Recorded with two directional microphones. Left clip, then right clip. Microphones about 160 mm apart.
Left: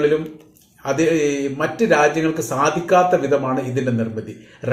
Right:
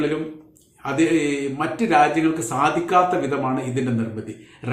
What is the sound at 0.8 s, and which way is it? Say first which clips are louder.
A man's voice: left 2 dB; 15° right (ahead or behind).